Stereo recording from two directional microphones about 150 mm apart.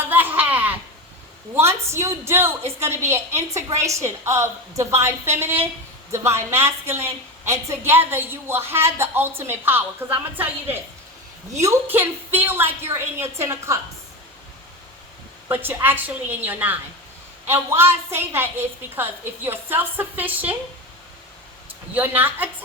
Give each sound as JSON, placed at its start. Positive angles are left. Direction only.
{"t": 0.0, "sound": "laughter", "side_deg": -15}
{"t": 1.5, "sound": "a woman's voice", "side_deg": -20}
{"t": 15.4, "sound": "a woman's voice", "side_deg": -15}
{"t": 21.9, "sound": "a woman's voice", "side_deg": -15}